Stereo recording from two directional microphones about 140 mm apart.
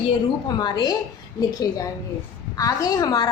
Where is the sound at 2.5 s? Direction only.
25° left (ahead or behind).